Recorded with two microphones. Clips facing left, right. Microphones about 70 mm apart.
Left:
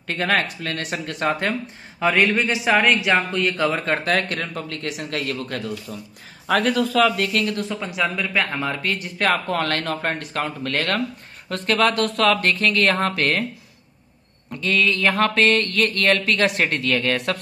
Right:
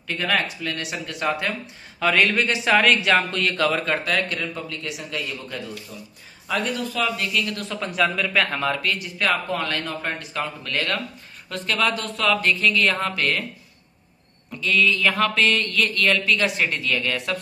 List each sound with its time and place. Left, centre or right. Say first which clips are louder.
0.0 s mantra: left 2 dB; left
2.0 s speech: left 1 dB; left
3.9 s speech: left 2 dB; left
4.3 s speech: left 1 dB; left
6.4 s speech: left 6 dB; left
7.4 s speech: left 4 dB; left
7.8 s a man's voice: right 5 dB; centre
8.8 s mantra: left 2 dB; left
11.9 s mantra: left 4 dB; left
14.6 s mantra: even; left